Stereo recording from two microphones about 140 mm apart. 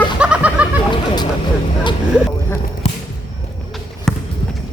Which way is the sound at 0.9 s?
30° left (ahead or behind).